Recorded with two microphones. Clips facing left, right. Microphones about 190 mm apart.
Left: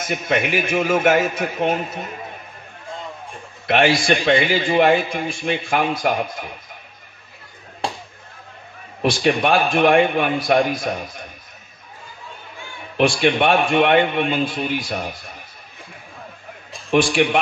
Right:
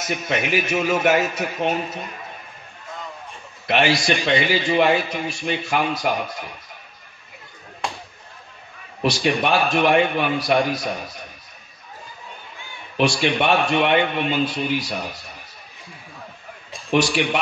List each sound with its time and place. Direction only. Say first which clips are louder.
0.0 s a man's voice: left 3 dB; 50° left (ahead or behind)
3.6 s a man's voice: left 2 dB; 50° left (ahead or behind)
9.1 s a man's voice: left 3 dB; 50° left (ahead or behind)
12.9 s a man's voice: left 3 dB; 50° left (ahead or behind)
16.9 s a man's voice: left 3 dB; 55° left (ahead or behind)